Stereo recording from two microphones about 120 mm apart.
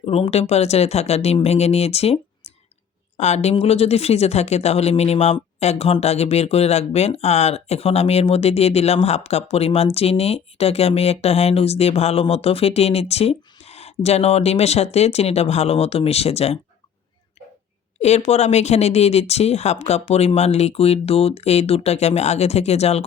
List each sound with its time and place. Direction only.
0.0 s speech: 50° left (ahead or behind)
18.0 s speech: 65° left (ahead or behind)